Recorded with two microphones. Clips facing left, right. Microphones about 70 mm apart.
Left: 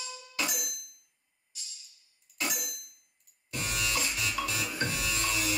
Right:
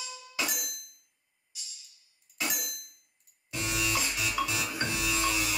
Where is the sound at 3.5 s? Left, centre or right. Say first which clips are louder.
Right 2 dB; centre.